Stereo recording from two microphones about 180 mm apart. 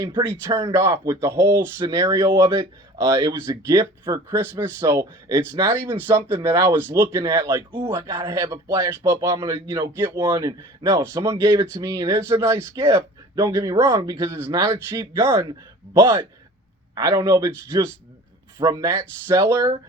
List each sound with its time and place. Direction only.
0.1 s speech: 25° right (ahead or behind)
0.5 s speech: 15° right (ahead or behind)
16.9 s speech: 20° right (ahead or behind)
18.6 s speech: 15° right (ahead or behind)